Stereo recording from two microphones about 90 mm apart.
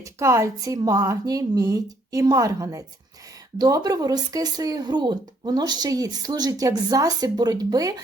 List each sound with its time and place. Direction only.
0.0 s a woman's voice: 35° right (ahead or behind)